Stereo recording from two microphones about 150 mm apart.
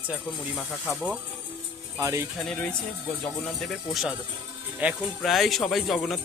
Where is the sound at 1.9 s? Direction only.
20° right (ahead or behind).